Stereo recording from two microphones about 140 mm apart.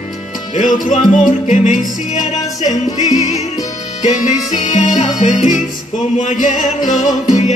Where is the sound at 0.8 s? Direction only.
65° left (ahead or behind).